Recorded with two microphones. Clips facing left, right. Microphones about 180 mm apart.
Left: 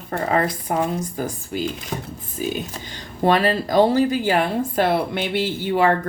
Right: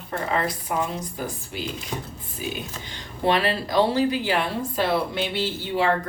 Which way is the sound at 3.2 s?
45° left (ahead or behind).